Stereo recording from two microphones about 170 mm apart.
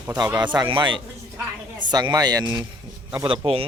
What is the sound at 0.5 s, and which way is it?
Speech, 25° right (ahead or behind).